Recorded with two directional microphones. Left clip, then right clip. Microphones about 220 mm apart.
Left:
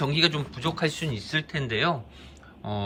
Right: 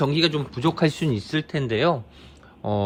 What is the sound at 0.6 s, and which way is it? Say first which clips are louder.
Speech: right 5 dB; 25° right (ahead or behind).